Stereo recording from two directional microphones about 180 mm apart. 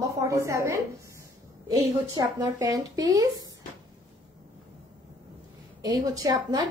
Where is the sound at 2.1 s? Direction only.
20° right (ahead or behind).